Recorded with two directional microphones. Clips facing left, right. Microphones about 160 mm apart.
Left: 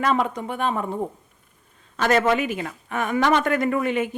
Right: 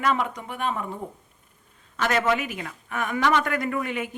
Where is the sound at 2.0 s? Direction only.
30° left (ahead or behind).